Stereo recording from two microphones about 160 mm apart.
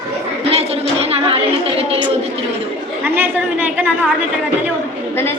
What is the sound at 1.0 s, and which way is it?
Speech, 35° right (ahead or behind).